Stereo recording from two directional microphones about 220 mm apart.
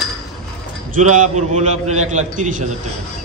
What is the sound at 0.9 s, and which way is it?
A man's voice, 35° right (ahead or behind).